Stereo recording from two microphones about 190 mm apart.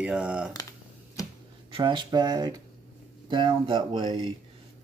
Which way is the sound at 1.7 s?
25° right (ahead or behind).